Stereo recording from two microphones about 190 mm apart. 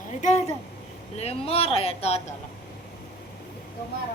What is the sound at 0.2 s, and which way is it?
A woman's voice, 40° left (ahead or behind).